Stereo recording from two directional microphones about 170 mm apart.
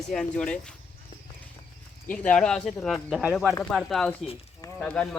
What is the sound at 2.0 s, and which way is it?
Speech, 5° left (ahead or behind).